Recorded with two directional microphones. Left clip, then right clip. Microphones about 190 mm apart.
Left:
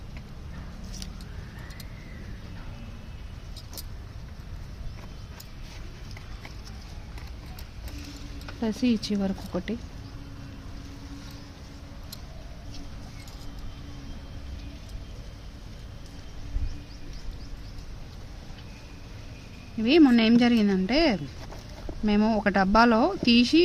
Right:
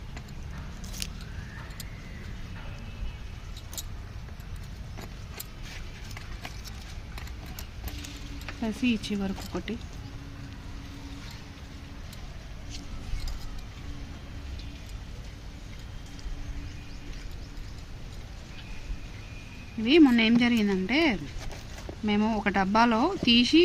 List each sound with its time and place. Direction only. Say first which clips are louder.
8.6 s speech: left 2 dB; 55° left (ahead or behind)
19.8 s speech: left 1 dB; 60° left (ahead or behind)